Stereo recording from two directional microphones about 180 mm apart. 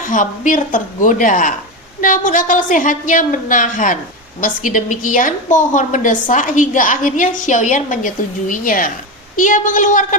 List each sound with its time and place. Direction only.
0.0 s a woman's voice: 45° left (ahead or behind)